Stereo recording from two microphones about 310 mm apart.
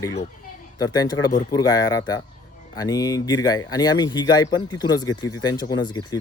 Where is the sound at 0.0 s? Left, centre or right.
Centre.